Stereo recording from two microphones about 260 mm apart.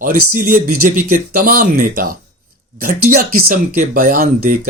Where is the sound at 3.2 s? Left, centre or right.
Right.